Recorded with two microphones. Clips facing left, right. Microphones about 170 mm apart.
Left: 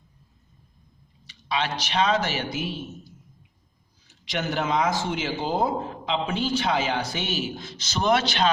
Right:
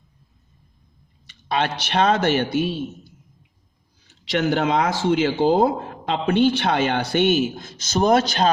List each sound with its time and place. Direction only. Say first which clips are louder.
1.3 s speech: right 4 dB; 50° right (ahead or behind)
4.1 s speech: right 7 dB; 65° right (ahead or behind); by 8.4 s 40° right (ahead or behind)